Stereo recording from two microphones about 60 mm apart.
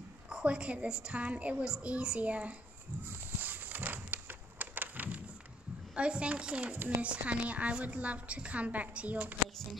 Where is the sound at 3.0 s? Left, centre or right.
Right.